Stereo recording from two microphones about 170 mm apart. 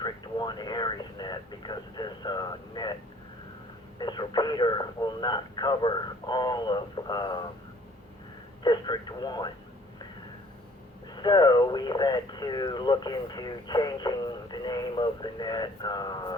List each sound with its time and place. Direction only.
0.0 s radio: 25° left (ahead or behind)
3.9 s radio: 25° left (ahead or behind)
8.6 s speech: 25° left (ahead or behind)
11.1 s speech: 25° left (ahead or behind)